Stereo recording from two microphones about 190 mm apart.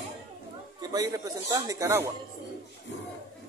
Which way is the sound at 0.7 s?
20° right (ahead or behind).